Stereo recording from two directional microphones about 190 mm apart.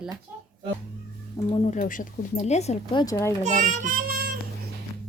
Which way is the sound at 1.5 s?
40° left (ahead or behind).